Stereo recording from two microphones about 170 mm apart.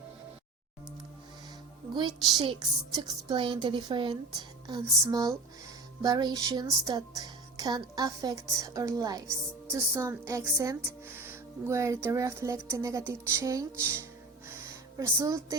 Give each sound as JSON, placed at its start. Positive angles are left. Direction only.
{"t": 2.0, "sound": "speech", "side_deg": -25}